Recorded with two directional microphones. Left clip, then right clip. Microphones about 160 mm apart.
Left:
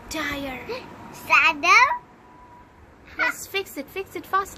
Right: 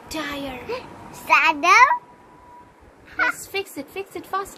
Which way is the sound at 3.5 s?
20° left (ahead or behind).